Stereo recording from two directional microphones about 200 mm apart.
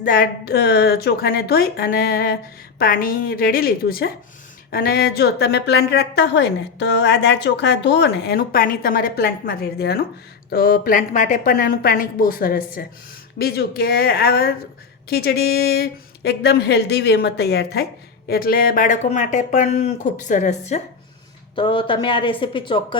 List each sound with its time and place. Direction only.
0.0 s a woman's voice: 45° left (ahead or behind)
21.5 s a woman's voice: 25° left (ahead or behind)